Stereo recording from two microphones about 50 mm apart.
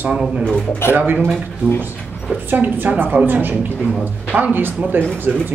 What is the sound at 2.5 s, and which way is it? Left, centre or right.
Speech, right.